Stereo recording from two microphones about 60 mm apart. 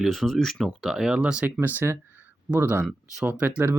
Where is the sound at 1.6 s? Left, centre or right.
Right.